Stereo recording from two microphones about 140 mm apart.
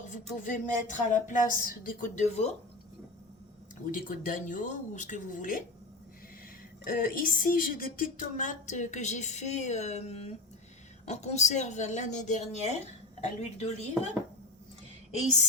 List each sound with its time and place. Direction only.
0.1 s a woman's voice: 70° left (ahead or behind); by 2.5 s 50° left (ahead or behind)
3.9 s speech: 75° left (ahead or behind)
6.8 s a woman's voice: 85° left; by 14.1 s 55° left (ahead or behind)